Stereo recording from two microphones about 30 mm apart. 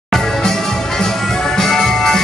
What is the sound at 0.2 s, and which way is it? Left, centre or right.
Music, centre.